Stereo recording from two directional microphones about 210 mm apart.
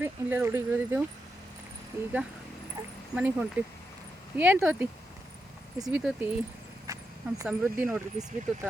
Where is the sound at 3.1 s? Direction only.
5° right (ahead or behind).